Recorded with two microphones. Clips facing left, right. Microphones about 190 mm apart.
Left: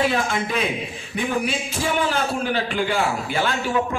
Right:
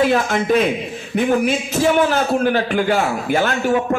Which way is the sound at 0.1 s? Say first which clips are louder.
Right 7 dB; 45° right (ahead or behind).